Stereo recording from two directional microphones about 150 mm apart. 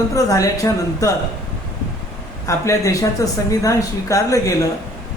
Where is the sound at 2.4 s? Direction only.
20° left (ahead or behind).